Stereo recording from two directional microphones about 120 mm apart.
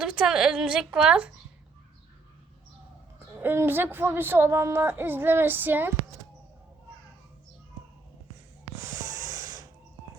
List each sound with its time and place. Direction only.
0.0 s a woman's voice: 5° right (ahead or behind)
3.4 s a woman's voice: 20° right (ahead or behind)
8.8 s snort: 25° right (ahead or behind)